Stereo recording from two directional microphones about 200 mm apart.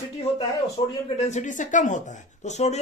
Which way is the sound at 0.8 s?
25° left (ahead or behind).